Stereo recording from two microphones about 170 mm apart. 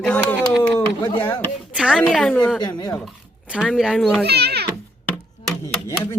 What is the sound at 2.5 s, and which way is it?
Speech, 25° left (ahead or behind).